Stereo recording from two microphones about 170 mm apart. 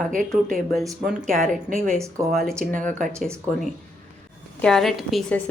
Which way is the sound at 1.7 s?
50° right (ahead or behind).